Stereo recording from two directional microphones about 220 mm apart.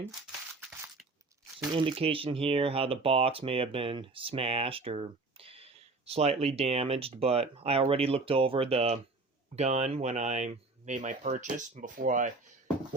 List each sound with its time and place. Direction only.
1.5 s speech: 20° right (ahead or behind)